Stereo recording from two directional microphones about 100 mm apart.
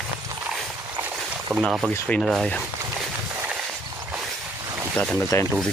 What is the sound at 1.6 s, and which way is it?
Speech, centre (ahead or behind).